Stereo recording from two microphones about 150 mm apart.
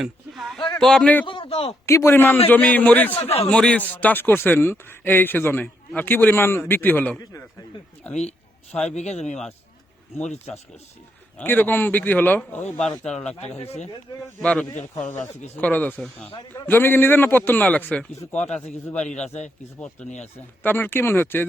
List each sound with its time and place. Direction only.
0.0 s a sound: centre (ahead or behind)
0.8 s a man's voice: 5° left (ahead or behind)
1.3 s a man's voice: 35° left (ahead or behind)
1.9 s speech: 15° left (ahead or behind)
9.0 s speech: 50° left (ahead or behind)
11.3 s a man's voice: 10° left (ahead or behind)
13.6 s speech: 45° left (ahead or behind)
14.4 s a man's voice: 5° left (ahead or behind)
18.3 s speech: 50° left (ahead or behind)
20.6 s speech: 10° left (ahead or behind)